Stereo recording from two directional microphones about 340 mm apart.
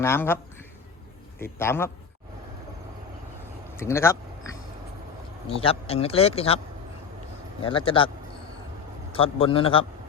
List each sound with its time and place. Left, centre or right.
0.0 s speech: centre
1.4 s speech: centre
3.8 s speech: centre
7.6 s speech: centre
9.1 s speech: centre